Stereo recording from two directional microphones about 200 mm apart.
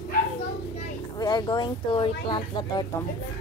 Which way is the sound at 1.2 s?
20° left (ahead or behind).